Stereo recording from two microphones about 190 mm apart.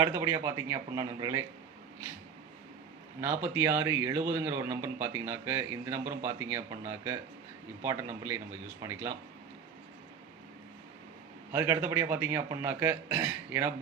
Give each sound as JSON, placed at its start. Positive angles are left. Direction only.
{"t": 0.0, "sound": "a man's voice", "side_deg": -15}
{"t": 3.2, "sound": "a man's voice", "side_deg": -10}
{"t": 8.8, "sound": "a man's voice", "side_deg": -15}
{"t": 11.5, "sound": "a man's voice", "side_deg": -10}